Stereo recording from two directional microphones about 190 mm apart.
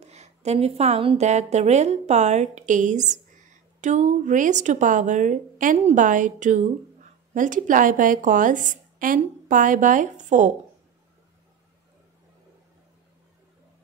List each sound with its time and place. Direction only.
0.0 s a woman's voice: 35° right (ahead or behind)